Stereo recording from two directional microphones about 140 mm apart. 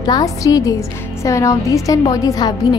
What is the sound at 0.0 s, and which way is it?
A woman's voice, 25° left (ahead or behind).